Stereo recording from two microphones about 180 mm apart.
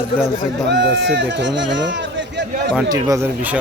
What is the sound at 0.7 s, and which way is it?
Speech, 70° right (ahead or behind).